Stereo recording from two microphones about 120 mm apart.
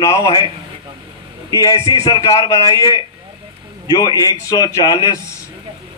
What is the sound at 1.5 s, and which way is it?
A man's voice, 30° left (ahead or behind).